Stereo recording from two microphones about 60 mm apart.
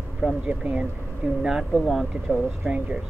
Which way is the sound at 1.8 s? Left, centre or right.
Centre.